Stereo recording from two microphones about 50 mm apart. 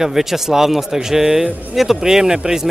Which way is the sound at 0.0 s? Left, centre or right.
Centre.